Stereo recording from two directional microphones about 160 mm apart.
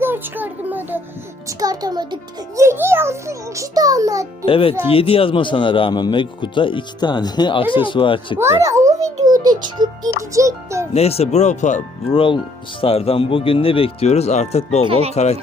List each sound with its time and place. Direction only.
0.0 s a sound: 10° right (ahead or behind)
1.5 s a child's voice: 20° right (ahead or behind)
2.6 s a child's voice: 15° right (ahead or behind)
4.4 s speech: 35° left (ahead or behind)
8.4 s music: 15° right (ahead or behind)
9.7 s a child's voice: 25° right (ahead or behind)
10.9 s speech: 40° left (ahead or behind)
12.1 s speech: 35° left (ahead or behind)